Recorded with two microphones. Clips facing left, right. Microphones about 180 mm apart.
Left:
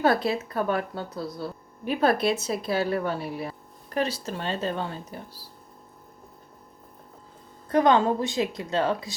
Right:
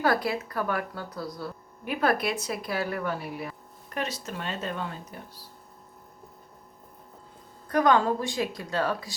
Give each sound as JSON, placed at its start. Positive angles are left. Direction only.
{"t": 0.0, "sound": "speech", "side_deg": 25}
{"t": 7.7, "sound": "speech", "side_deg": 25}